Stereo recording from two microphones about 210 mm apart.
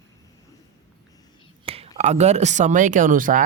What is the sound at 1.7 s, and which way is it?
Speech, 30° right (ahead or behind).